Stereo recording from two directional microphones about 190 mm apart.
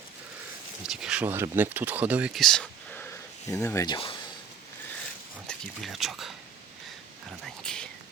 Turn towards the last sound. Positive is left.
turn(degrees=5)  # may be behind; listen again after turning